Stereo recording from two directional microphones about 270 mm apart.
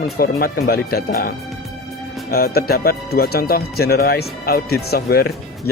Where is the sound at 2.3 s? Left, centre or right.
Left.